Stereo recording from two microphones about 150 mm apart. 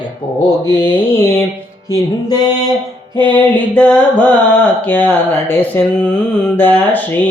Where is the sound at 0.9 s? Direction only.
15° left (ahead or behind).